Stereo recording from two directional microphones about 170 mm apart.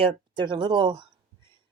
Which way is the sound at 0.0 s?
30° right (ahead or behind).